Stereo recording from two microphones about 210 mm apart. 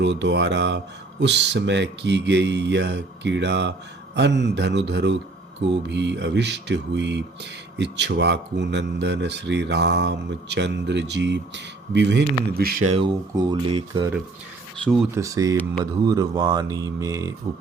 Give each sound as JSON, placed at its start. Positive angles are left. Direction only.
{"t": 0.0, "sound": "speech", "side_deg": -55}
{"t": 12.9, "sound": "speech", "side_deg": -20}
{"t": 15.1, "sound": "speech", "side_deg": -15}